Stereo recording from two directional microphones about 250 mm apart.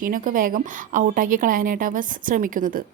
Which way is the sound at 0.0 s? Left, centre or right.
Right.